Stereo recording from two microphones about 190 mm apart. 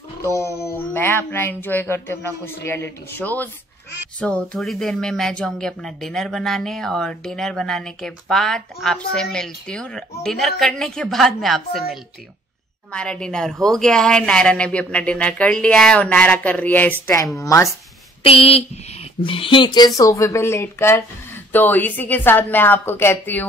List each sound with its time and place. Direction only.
0.6 s speech: 10° left (ahead or behind)
12.9 s speech: 5° left (ahead or behind)
18.2 s speech: 30° left (ahead or behind); by 23.4 s 10° left (ahead or behind)